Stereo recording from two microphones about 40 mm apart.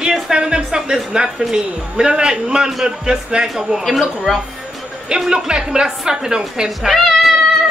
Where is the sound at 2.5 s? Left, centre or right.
Centre.